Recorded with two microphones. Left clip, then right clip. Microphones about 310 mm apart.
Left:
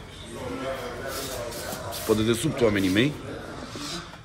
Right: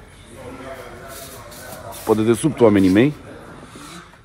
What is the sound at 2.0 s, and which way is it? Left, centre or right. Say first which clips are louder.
Speech: right 7 dB; centre.